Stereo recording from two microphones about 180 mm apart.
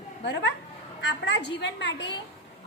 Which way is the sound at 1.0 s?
75° left (ahead or behind).